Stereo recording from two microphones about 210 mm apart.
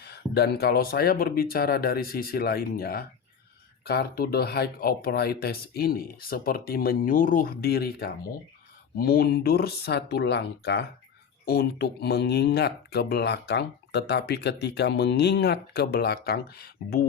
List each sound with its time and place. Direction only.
0.0 s speech: 50° left (ahead or behind)